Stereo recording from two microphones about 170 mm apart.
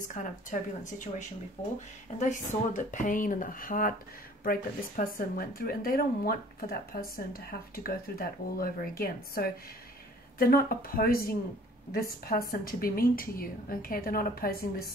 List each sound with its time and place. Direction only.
0.1 s speech: 50° left (ahead or behind)
2.1 s speech: 45° left (ahead or behind)